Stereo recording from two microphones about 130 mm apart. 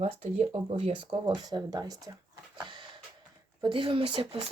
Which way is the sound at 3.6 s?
40° right (ahead or behind).